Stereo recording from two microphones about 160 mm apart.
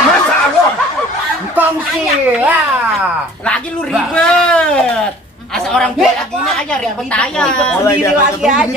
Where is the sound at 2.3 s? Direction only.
10° right (ahead or behind).